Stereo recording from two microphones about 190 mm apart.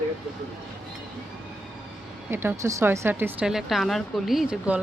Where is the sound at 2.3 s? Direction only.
10° right (ahead or behind).